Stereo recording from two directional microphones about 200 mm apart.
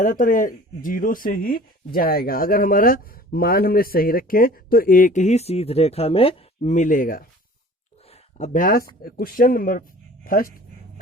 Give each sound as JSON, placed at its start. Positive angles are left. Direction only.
{"t": 0.0, "sound": "speech", "side_deg": 40}
{"t": 8.1, "sound": "a sound", "side_deg": 40}
{"t": 9.0, "sound": "speech", "side_deg": 45}